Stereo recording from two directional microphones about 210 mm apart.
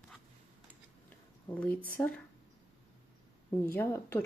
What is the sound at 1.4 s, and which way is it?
Speech, 5° left (ahead or behind).